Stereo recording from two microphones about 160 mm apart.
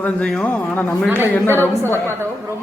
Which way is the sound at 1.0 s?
15° right (ahead or behind).